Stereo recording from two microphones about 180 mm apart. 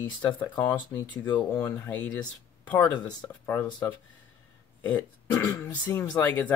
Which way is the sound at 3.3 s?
10° left (ahead or behind).